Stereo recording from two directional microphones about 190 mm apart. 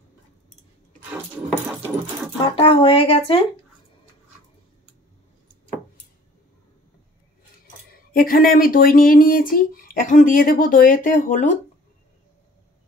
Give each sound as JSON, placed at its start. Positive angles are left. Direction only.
{"t": 2.5, "sound": "speech", "side_deg": 30}
{"t": 8.1, "sound": "speech", "side_deg": 50}